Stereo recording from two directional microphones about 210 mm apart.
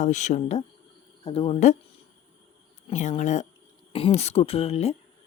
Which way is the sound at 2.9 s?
35° left (ahead or behind).